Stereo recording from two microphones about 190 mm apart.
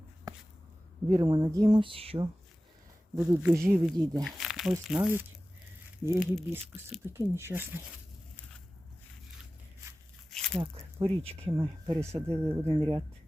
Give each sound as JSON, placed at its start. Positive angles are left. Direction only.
{"t": 0.3, "sound": "a sound", "side_deg": -20}
{"t": 1.1, "sound": "speech", "side_deg": -25}
{"t": 3.2, "sound": "speech", "side_deg": -15}
{"t": 4.2, "sound": "crumpling", "side_deg": 0}
{"t": 4.9, "sound": "speech", "side_deg": -10}
{"t": 7.0, "sound": "speech", "side_deg": -15}
{"t": 10.3, "sound": "a sound", "side_deg": 5}
{"t": 11.0, "sound": "speech", "side_deg": -30}
{"t": 11.6, "sound": "speech", "side_deg": -15}